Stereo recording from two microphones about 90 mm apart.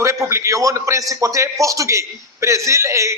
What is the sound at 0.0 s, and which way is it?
A man's voice, 30° right (ahead or behind).